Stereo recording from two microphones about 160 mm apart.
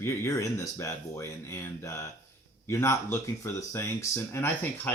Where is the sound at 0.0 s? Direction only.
15° left (ahead or behind).